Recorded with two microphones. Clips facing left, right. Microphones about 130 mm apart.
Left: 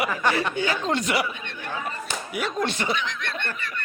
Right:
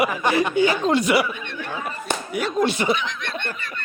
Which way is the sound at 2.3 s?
Centre (ahead or behind).